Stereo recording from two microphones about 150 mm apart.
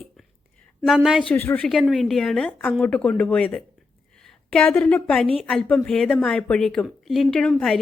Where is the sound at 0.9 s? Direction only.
Centre (ahead or behind).